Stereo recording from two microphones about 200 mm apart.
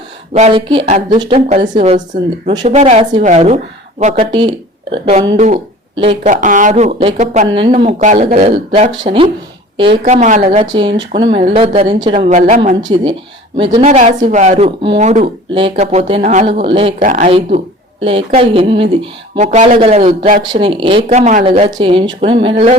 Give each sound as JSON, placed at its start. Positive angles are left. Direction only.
{"t": 0.3, "sound": "speech", "side_deg": -30}
{"t": 6.0, "sound": "a woman's voice", "side_deg": -35}
{"t": 10.0, "sound": "speech", "side_deg": -40}
{"t": 10.8, "sound": "speech", "side_deg": -25}
{"t": 12.8, "sound": "speech", "side_deg": -25}
{"t": 13.8, "sound": "speech", "side_deg": -35}
{"t": 20.4, "sound": "speech", "side_deg": -25}